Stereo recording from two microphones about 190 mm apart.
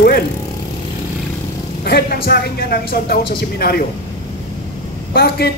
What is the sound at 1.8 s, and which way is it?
Speech, 55° left (ahead or behind).